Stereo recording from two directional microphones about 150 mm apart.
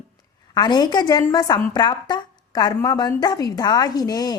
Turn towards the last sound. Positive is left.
turn(degrees=25)  # may be behind; listen again after turning